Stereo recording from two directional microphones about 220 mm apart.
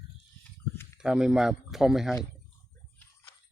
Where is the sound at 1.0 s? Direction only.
5° right (ahead or behind).